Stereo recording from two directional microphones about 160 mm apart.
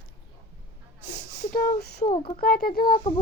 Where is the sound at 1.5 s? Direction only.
70° left (ahead or behind).